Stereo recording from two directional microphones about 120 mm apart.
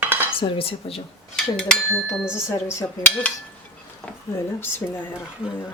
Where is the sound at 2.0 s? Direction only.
5° right (ahead or behind).